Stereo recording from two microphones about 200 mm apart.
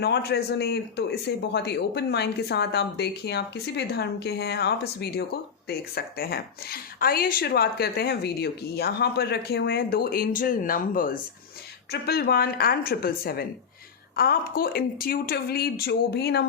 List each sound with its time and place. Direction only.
0.0 s speech: 55° left (ahead or behind)